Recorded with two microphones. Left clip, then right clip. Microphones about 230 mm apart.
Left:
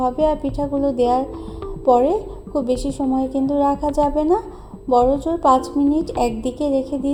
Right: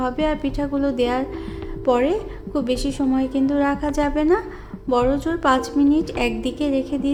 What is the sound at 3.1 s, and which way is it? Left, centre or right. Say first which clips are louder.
A woman's voice: left 2 dB; centre.